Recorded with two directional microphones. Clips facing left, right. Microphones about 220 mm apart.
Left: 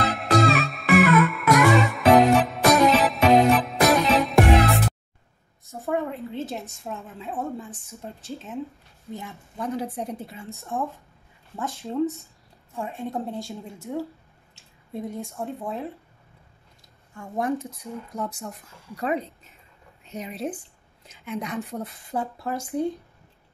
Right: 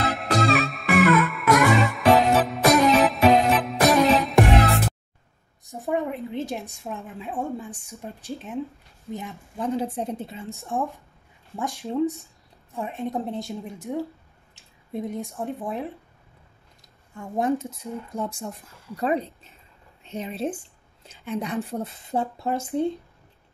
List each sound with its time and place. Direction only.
0.1 s music: centre (ahead or behind)
5.7 s a woman's voice: 15° right (ahead or behind)
9.6 s speech: 25° right (ahead or behind)
10.5 s a woman's voice: 15° right (ahead or behind)
15.3 s a woman's voice: 15° right (ahead or behind)
17.2 s speech: 25° right (ahead or behind)